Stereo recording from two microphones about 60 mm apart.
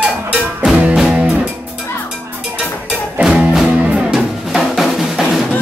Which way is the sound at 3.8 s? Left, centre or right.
Right.